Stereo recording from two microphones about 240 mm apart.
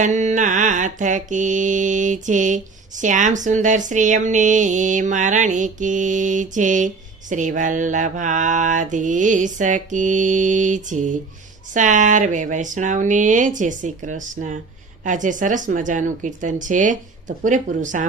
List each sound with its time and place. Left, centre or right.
0.0 s mantra: right